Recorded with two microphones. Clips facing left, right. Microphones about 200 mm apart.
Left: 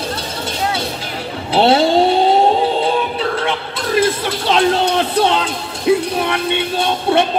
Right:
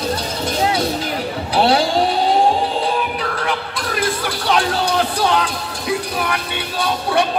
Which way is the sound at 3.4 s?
25° left (ahead or behind).